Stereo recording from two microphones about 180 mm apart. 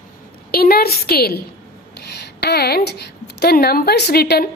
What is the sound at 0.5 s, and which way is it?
A woman's voice, 60° left (ahead or behind).